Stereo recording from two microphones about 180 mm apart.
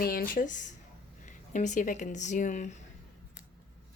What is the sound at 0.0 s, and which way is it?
Speech, 55° left (ahead or behind).